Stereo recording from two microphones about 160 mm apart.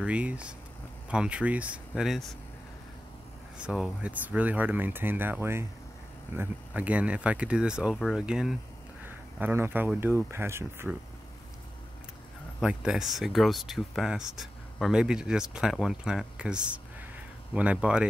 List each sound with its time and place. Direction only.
0.0 s speech: 10° right (ahead or behind)
3.5 s speech: 5° right (ahead or behind)
12.5 s speech: 5° right (ahead or behind)